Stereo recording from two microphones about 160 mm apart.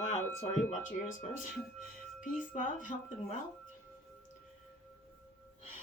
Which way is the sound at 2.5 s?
55° left (ahead or behind).